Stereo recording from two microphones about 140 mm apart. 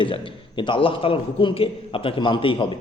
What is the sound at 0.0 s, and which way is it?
A man's voice, 35° left (ahead or behind).